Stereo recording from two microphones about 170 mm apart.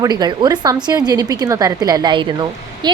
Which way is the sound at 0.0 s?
25° right (ahead or behind).